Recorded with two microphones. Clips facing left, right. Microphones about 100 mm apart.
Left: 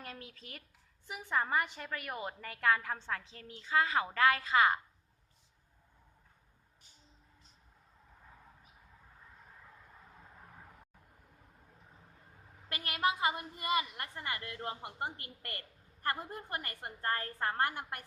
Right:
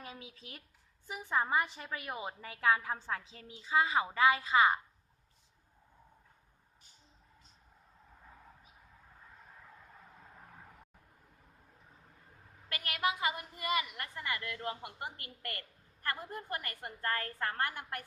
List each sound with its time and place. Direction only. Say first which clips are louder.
0.0 s a woman's voice: even; 5° right (ahead or behind)
12.6 s a woman's voice: left 1 dB; 25° left (ahead or behind)